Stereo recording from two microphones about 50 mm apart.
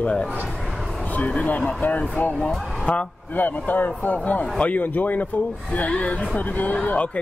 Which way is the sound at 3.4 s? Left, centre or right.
Left.